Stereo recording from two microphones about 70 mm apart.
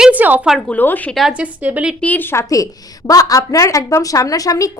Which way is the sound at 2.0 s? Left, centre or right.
Left.